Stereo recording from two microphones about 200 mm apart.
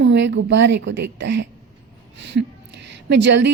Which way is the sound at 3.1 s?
60° right (ahead or behind).